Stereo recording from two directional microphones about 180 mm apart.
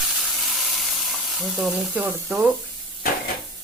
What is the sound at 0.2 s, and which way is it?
Frying, centre (ahead or behind).